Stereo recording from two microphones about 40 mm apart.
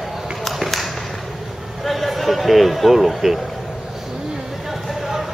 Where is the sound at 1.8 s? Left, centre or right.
Centre.